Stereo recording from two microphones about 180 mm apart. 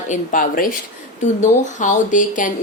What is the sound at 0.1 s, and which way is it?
Speech, 45° left (ahead or behind).